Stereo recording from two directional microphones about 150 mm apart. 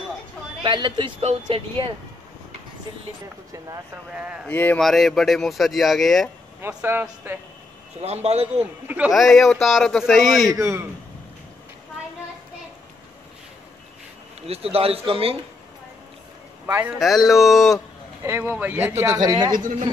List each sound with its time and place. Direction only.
0.7 s speech: 30° right (ahead or behind)
3.5 s speech: 20° right (ahead or behind)
4.1 s speech: 5° right (ahead or behind)
4.5 s speech: 10° left (ahead or behind)
4.8 s speech: centre (ahead or behind)
6.6 s speech: 15° right (ahead or behind)
8.0 s speech: 45° right (ahead or behind)
8.8 s speech: 10° right (ahead or behind)
10.5 s speech: 15° right (ahead or behind)
14.5 s speech: 40° right (ahead or behind)
16.6 s a man's voice: 15° right (ahead or behind)
17.0 s speech: centre (ahead or behind)
18.2 s speech: 15° right (ahead or behind)
19.2 s speech: 25° right (ahead or behind)